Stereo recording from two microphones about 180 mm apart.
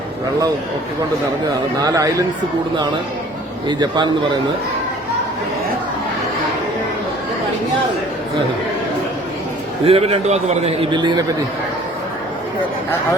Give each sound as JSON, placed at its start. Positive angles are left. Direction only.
{"t": 1.8, "sound": "a man's voice", "side_deg": -20}
{"t": 3.7, "sound": "a man's voice", "side_deg": -25}
{"t": 9.8, "sound": "a man's voice", "side_deg": -35}